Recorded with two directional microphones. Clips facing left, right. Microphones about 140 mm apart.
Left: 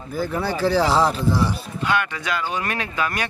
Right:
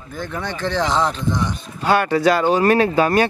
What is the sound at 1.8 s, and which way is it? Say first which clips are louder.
Speech: right 8 dB; 35° right (ahead or behind).